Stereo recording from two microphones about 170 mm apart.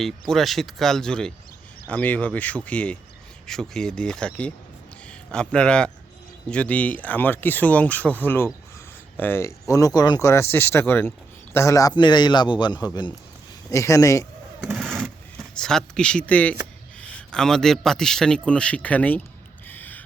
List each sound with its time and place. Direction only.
0.0 s a man's voice: centre (ahead or behind); by 14.3 s 20° left (ahead or behind)
14.6 s a sound: centre (ahead or behind)
15.5 s speech: 5° left (ahead or behind)
19.6 s owl: 10° left (ahead or behind)